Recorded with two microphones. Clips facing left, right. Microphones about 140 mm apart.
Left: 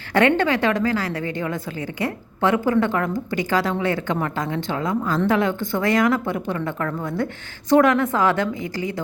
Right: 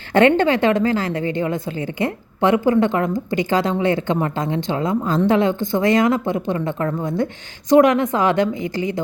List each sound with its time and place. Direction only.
0.1 s a woman's voice: 25° right (ahead or behind)